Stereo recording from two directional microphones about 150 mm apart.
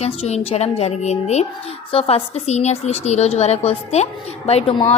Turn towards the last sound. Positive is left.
turn(degrees=45)  # may be behind; listen again after turning